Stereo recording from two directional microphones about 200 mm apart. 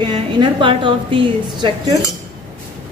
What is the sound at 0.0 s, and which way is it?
A woman's voice, 25° right (ahead or behind).